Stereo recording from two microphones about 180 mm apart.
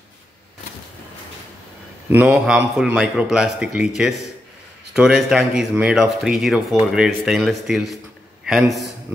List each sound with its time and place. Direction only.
2.0 s speech: 10° right (ahead or behind)